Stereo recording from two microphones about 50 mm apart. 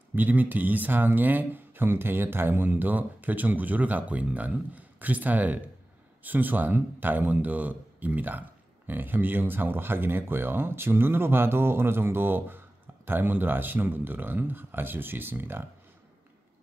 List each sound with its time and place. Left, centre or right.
0.1 s a man's voice: right